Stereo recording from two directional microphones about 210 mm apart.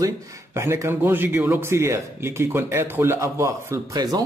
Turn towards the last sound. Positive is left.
turn(degrees=-15)  # may be behind; listen again after turning